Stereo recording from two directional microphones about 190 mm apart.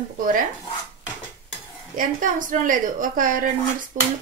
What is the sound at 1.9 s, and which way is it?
A woman's voice, 45° right (ahead or behind).